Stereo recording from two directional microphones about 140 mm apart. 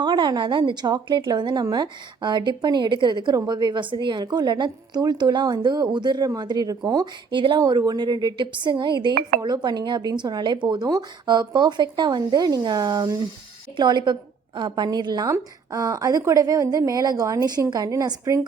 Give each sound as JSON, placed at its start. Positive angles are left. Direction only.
{"t": 0.0, "sound": "a woman's voice", "side_deg": -30}